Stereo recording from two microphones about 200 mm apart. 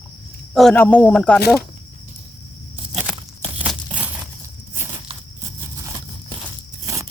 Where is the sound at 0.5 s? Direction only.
5° left (ahead or behind).